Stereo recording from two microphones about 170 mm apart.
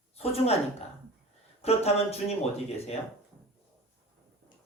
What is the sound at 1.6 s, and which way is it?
Speech, 35° left (ahead or behind).